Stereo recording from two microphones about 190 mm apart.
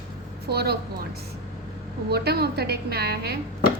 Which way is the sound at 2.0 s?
55° right (ahead or behind).